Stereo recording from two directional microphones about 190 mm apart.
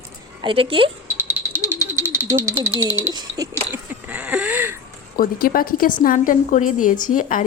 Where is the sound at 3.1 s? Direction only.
20° right (ahead or behind).